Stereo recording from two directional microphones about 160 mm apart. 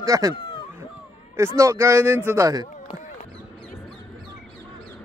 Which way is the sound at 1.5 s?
20° right (ahead or behind).